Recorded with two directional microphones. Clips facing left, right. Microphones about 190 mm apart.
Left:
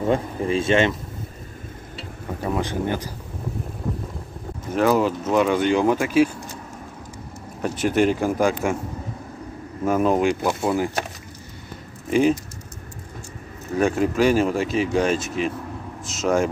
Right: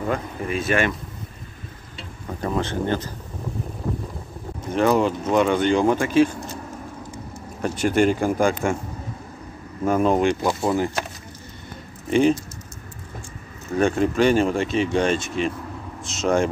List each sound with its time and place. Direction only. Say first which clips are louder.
0.0 s speech: left 4 dB; 30° left (ahead or behind)
2.0 s speech: even; 10° left (ahead or behind)
4.7 s speech: even; 5° left (ahead or behind)
7.6 s speech: even; 5° left (ahead or behind)
9.8 s speech: even; 5° left (ahead or behind)
12.1 s speech: right 1 dB; 5° left (ahead or behind)
13.7 s speech: even; 5° left (ahead or behind)